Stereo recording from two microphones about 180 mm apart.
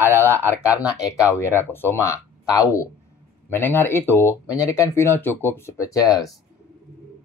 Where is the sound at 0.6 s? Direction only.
20° left (ahead or behind).